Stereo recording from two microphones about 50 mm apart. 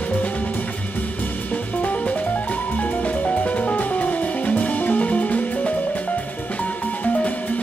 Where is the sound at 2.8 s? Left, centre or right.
Left.